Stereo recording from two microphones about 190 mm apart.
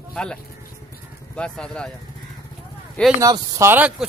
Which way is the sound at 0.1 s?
5° left (ahead or behind).